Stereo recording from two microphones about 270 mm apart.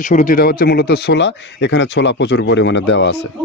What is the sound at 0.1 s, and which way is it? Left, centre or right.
A man's voice, left.